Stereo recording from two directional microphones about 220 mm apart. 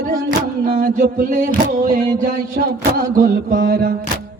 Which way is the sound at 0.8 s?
40° right (ahead or behind).